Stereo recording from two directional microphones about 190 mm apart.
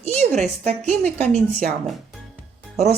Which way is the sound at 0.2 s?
40° right (ahead or behind).